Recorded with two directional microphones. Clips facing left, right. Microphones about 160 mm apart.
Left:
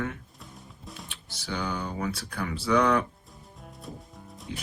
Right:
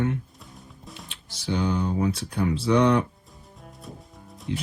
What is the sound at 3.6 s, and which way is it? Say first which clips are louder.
Music: even; centre (ahead or behind).